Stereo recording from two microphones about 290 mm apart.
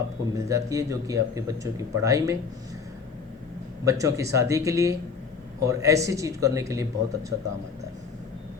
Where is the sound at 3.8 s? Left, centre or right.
Centre.